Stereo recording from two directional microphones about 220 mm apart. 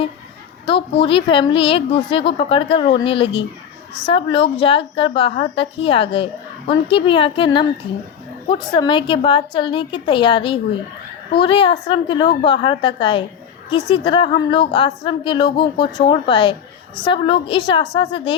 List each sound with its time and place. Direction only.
0.6 s a woman's voice: 25° left (ahead or behind)